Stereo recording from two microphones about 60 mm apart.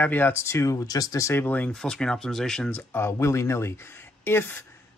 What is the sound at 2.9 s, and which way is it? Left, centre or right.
Speech, left.